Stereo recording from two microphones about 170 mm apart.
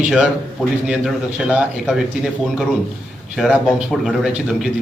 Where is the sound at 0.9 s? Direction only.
5° right (ahead or behind).